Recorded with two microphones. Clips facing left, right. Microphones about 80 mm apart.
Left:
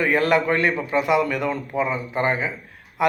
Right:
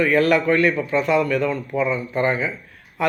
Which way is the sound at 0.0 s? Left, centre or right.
Left.